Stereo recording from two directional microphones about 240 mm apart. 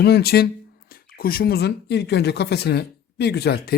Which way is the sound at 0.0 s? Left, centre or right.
Left.